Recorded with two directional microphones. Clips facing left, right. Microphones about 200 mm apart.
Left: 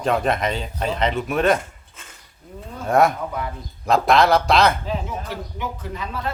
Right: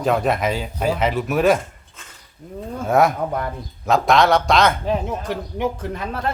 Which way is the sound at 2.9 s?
Centre (ahead or behind).